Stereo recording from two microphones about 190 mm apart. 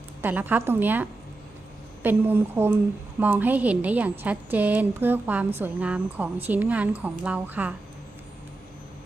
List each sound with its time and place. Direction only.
0.2 s a woman's voice: 10° right (ahead or behind)
2.0 s a woman's voice: 10° right (ahead or behind)